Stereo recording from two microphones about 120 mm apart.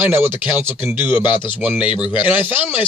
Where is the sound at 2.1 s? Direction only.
10° right (ahead or behind).